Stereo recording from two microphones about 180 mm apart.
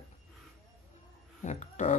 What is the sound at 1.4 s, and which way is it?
Speech, 40° left (ahead or behind).